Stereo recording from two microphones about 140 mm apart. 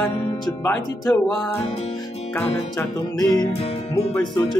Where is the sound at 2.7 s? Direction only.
25° left (ahead or behind).